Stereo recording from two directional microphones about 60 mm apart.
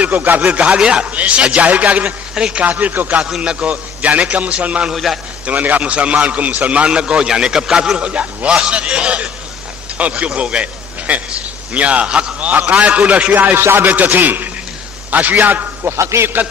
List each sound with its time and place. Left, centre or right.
0.0 s a man's voice: right
3.2 s a man's voice: centre
3.7 s a man's voice: right
4.9 s a man's voice: centre
5.5 s a man's voice: right
13.6 s a man's voice: right
16.0 s a man's voice: right